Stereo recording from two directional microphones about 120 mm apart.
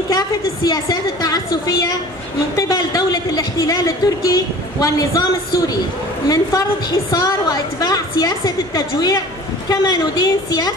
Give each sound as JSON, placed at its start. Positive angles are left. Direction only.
{"t": 0.7, "sound": "a woman's voice", "side_deg": 30}
{"t": 2.5, "sound": "a sound", "side_deg": 30}
{"t": 6.2, "sound": "a woman's voice", "side_deg": 30}